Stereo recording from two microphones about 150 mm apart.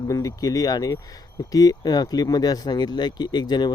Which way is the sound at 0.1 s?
25° left (ahead or behind).